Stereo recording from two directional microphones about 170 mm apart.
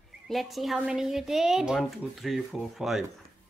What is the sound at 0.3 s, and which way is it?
Speech, centre (ahead or behind).